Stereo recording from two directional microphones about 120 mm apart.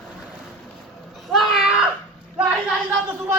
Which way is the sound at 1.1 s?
Centre (ahead or behind).